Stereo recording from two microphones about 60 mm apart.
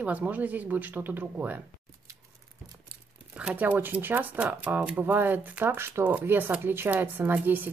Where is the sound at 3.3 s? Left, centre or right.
Right.